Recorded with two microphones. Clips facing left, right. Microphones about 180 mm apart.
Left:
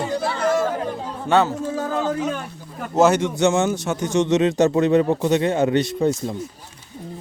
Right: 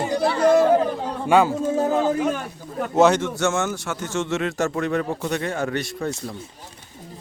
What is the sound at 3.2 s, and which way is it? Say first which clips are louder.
A man's voice: left 4 dB; 15° left (ahead or behind).